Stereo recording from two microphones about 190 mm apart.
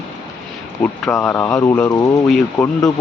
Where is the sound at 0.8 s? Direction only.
10° left (ahead or behind).